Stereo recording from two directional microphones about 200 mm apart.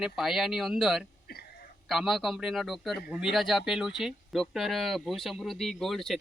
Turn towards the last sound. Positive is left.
turn(degrees=0)  # may be behind; listen again after turning